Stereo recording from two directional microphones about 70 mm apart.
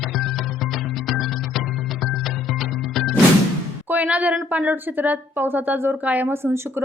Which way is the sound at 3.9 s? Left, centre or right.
Right.